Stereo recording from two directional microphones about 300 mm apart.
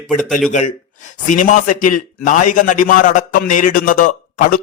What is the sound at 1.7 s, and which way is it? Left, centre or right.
A man's voice, left.